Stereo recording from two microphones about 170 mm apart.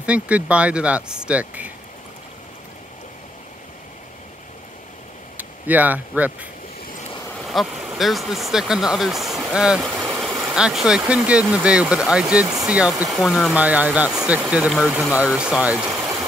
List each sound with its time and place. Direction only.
0.0 s speech: 5° right (ahead or behind)
5.4 s speech: 10° right (ahead or behind)
7.3 s speech: centre (ahead or behind)
15.9 s vehicle: 20° right (ahead or behind)